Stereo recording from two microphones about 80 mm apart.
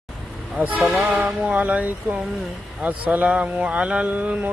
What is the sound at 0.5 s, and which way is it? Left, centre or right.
Speech, centre.